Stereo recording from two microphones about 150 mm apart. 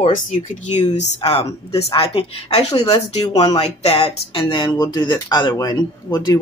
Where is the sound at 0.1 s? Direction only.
50° left (ahead or behind).